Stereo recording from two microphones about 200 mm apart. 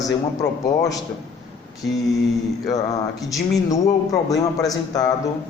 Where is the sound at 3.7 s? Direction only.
15° left (ahead or behind).